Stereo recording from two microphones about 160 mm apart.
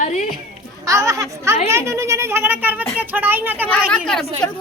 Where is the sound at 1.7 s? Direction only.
15° right (ahead or behind).